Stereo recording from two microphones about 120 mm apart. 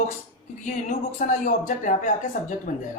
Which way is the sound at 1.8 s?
90° left.